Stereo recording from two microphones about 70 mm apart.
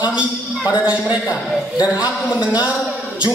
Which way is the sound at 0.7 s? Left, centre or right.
Right.